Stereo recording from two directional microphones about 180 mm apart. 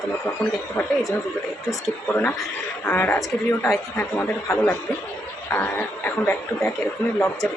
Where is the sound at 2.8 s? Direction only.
10° left (ahead or behind).